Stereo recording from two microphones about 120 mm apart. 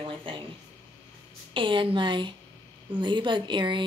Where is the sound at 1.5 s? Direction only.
45° right (ahead or behind).